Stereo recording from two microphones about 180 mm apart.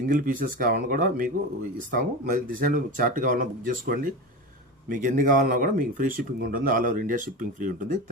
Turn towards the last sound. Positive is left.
turn(degrees=-45)  # may be behind; listen again after turning